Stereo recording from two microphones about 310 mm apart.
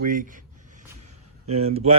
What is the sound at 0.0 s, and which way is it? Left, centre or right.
Speech, right.